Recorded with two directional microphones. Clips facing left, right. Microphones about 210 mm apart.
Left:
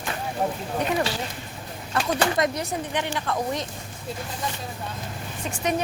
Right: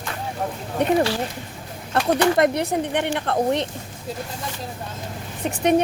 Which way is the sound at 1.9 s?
60° right (ahead or behind).